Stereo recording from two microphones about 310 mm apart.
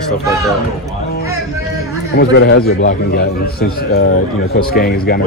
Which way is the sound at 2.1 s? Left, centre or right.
Left.